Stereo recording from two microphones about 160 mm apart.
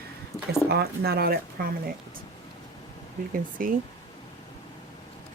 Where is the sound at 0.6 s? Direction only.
80° right.